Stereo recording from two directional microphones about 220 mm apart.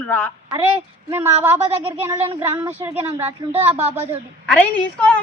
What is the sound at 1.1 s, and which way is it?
Speech, 10° right (ahead or behind).